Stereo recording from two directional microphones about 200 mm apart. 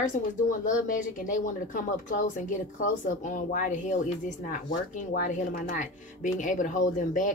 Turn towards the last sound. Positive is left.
turn(degrees=40)  # may be behind; listen again after turning